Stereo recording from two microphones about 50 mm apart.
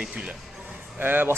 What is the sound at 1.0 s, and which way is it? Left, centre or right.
Speech, right.